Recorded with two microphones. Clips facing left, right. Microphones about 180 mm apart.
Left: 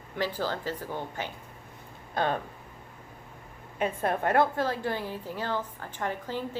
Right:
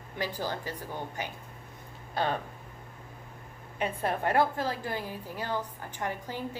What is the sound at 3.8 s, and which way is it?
Speech, 50° left (ahead or behind).